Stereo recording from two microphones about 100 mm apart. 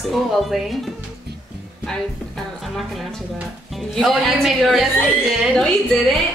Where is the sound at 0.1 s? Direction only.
Centre (ahead or behind).